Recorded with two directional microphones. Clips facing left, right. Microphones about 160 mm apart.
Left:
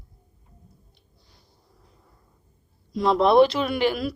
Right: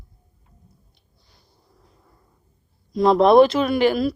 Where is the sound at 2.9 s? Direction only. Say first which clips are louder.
Right 5 dB; 45° right (ahead or behind).